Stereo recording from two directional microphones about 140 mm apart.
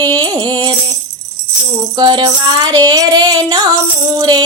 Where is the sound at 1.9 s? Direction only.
30° right (ahead or behind).